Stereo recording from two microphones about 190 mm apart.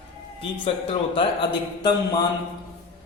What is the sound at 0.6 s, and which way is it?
Speech, 25° left (ahead or behind).